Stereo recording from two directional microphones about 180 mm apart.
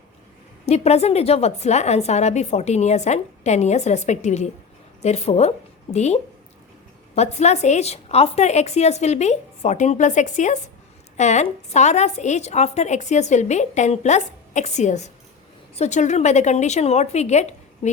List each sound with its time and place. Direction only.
0.6 s a woman's voice: 35° left (ahead or behind)
7.2 s a woman's voice: 40° left (ahead or behind)